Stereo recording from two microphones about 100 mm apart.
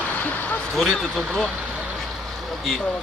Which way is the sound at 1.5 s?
10° right (ahead or behind).